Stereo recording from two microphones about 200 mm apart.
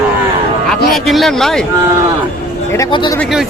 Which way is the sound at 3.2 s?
Centre (ahead or behind).